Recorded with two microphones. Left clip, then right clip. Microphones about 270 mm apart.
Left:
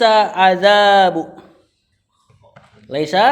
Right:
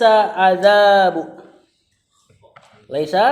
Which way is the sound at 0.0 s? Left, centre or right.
Left.